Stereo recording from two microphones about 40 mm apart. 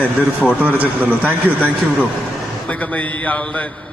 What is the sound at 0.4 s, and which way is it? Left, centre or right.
Speech, right.